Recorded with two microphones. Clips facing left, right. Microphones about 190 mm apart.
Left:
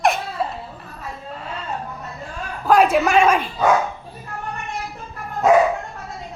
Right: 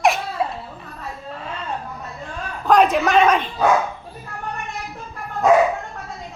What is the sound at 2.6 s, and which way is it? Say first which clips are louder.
Speech: even; 5° left (ahead or behind).